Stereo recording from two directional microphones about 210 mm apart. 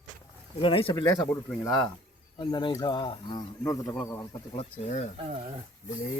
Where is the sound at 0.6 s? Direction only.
25° left (ahead or behind).